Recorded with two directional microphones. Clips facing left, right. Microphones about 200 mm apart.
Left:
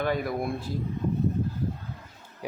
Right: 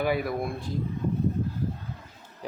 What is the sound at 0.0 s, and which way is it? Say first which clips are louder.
Speech: right 1 dB; 5° right (ahead or behind).